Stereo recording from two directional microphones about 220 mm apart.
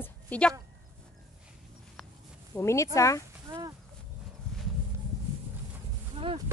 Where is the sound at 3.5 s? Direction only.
15° right (ahead or behind).